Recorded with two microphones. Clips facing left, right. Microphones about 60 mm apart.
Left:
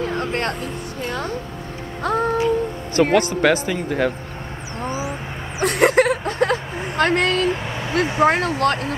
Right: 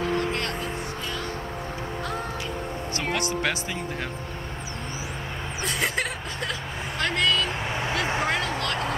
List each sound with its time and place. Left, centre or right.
0.2 s speech: left
2.3 s a sound: left
3.0 s speech: left
4.8 s vehicle: left
5.6 s a sound: left
7.0 s speech: left